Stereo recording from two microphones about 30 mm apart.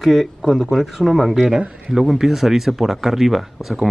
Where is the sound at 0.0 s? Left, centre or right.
Centre.